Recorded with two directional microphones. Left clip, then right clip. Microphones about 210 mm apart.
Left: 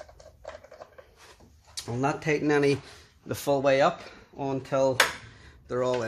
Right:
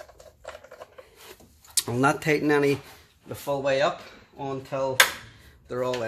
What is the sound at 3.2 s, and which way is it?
Speech, 55° left (ahead or behind).